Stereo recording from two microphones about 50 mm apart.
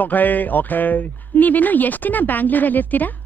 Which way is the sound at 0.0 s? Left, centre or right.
Left.